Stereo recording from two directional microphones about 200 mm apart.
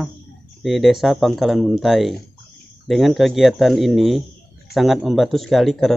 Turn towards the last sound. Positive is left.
turn(degrees=0)  # may be behind; listen again after turning